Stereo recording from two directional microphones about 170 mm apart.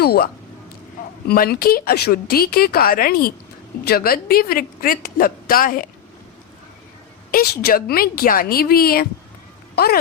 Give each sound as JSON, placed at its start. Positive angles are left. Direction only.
{"t": 0.0, "sound": "speech", "side_deg": 70}
{"t": 1.3, "sound": "a woman's voice", "side_deg": 65}
{"t": 7.3, "sound": "a woman's voice", "side_deg": 60}